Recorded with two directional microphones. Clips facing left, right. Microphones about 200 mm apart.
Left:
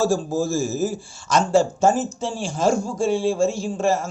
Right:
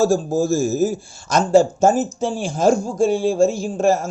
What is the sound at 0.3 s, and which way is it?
A man's voice, 45° right (ahead or behind).